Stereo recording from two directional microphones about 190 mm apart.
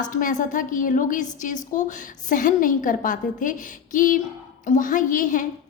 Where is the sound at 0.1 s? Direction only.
45° left (ahead or behind).